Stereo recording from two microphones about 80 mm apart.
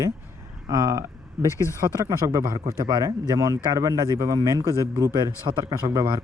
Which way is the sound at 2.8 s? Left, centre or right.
Right.